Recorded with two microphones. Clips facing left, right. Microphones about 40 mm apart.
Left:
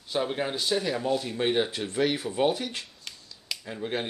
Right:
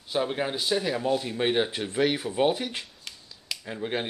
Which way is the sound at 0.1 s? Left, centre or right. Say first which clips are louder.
Right 1 dB; centre.